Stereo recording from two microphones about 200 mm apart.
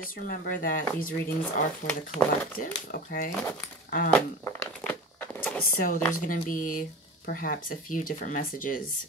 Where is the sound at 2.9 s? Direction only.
45° left (ahead or behind).